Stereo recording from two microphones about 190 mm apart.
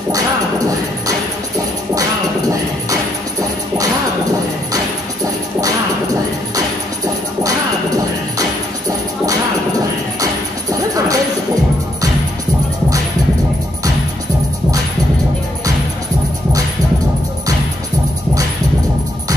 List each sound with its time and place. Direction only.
2.0 s music: 20° right (ahead or behind)
7.4 s music: 20° right (ahead or behind)
10.2 s music: 20° right (ahead or behind)